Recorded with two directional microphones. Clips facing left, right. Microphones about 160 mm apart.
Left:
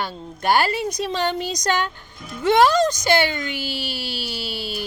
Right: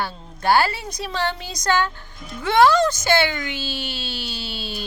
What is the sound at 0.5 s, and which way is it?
Speech, 20° left (ahead or behind).